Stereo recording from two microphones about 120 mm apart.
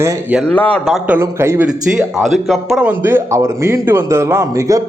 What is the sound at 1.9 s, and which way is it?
Speech, centre (ahead or behind).